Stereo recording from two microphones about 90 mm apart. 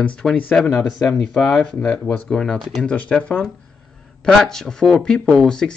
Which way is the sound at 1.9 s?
20° left (ahead or behind).